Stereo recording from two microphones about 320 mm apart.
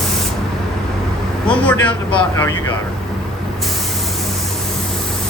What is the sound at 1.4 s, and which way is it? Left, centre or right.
Speech, centre.